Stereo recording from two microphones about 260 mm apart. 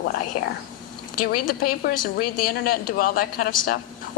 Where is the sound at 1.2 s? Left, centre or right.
Left.